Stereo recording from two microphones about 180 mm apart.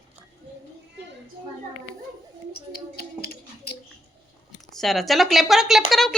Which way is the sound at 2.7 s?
60° left (ahead or behind).